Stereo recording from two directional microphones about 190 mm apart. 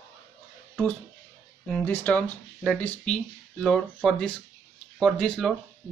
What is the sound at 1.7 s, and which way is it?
Speech, 10° left (ahead or behind).